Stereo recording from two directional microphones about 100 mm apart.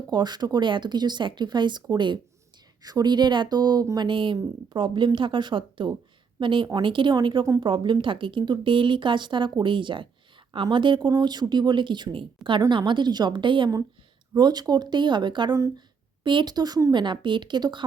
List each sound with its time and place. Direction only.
0.1 s a woman's voice: 45° right (ahead or behind)
14.3 s speech: 45° right (ahead or behind)